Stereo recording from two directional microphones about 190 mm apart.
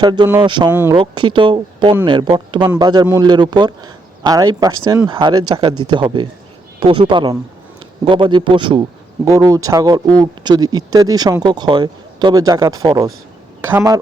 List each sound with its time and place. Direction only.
0.0 s speech: 20° right (ahead or behind)
0.7 s speech: 10° right (ahead or behind)
0.9 s speech: 25° right (ahead or behind)